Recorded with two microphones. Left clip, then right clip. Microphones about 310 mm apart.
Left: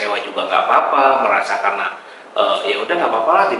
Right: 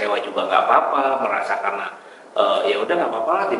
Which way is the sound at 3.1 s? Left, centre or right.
Centre.